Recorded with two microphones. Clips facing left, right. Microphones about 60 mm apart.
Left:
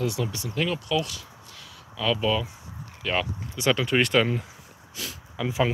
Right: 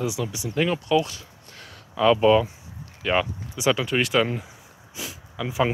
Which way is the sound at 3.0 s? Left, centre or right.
Centre.